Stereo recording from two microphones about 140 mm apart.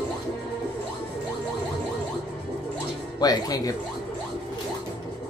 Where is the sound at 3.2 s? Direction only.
25° left (ahead or behind).